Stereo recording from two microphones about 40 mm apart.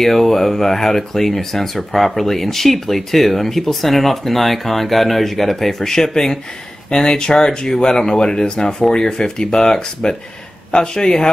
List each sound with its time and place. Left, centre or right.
0.0 s a man's voice: centre